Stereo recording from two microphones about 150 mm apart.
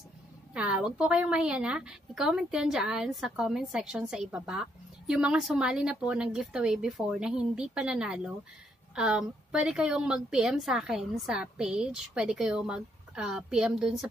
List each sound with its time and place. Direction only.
0.6 s a woman's voice: 5° right (ahead or behind)